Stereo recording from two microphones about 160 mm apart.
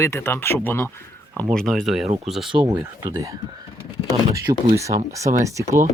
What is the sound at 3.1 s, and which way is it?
Speech, 20° right (ahead or behind).